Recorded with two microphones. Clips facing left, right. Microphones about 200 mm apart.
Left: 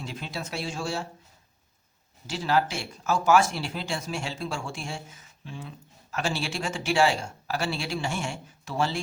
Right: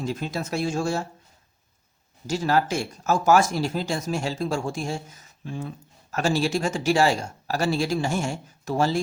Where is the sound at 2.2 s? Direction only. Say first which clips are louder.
Right 3 dB; 45° right (ahead or behind).